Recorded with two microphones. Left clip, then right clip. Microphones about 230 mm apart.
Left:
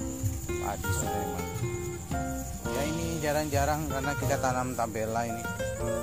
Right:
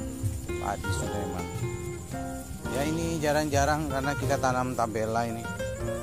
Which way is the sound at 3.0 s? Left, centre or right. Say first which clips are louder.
Right 3 dB; centre.